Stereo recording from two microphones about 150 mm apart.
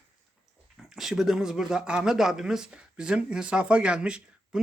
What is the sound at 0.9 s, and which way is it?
A man's voice, 5° right (ahead or behind).